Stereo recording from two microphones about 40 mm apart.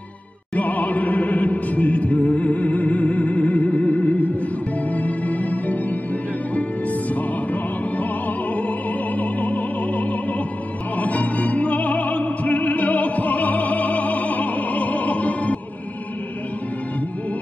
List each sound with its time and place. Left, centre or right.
0.6 s music: left
8.5 s music: left
11.0 s opera: left